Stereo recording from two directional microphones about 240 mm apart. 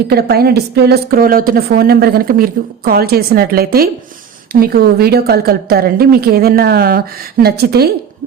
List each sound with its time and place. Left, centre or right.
0.1 s a woman's voice: right